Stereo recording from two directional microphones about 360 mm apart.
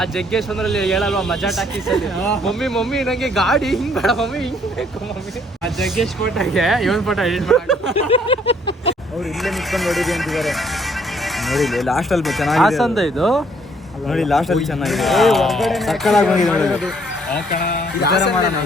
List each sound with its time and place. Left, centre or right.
0.0 s a man's voice: centre
7.9 s a sound: centre
9.4 s a man's voice: centre
17.5 s speech: left